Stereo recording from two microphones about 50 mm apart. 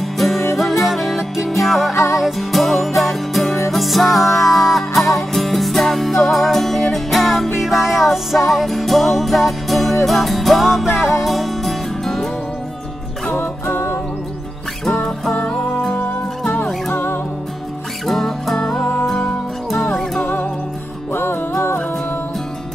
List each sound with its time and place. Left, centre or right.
0.2 s music: centre
14.9 s music: centre
16.9 s music: left
18.0 s music: centre
21.1 s music: left